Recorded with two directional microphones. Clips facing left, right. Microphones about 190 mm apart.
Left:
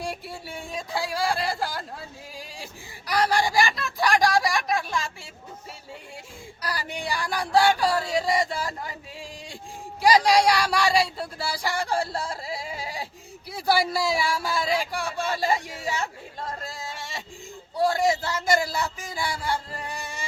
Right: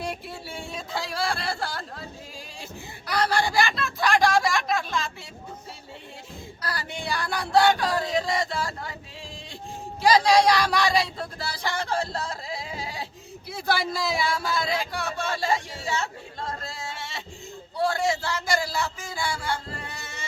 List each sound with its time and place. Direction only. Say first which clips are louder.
0.0 s music: even; 10° left (ahead or behind)
0.9 s a sound: left 3 dB; 15° left (ahead or behind)
3.1 s speech: left 1 dB; 15° left (ahead or behind)
3.9 s a sound: even; 15° left (ahead or behind)
6.6 s speech: left 2 dB; 10° left (ahead or behind)
10.0 s speech: even; 10° left (ahead or behind)
16.9 s heart murmur: even; 10° left (ahead or behind)
17.7 s a man's voice: left 3 dB; 15° left (ahead or behind)
19.2 s a sound: left 1 dB; 15° left (ahead or behind)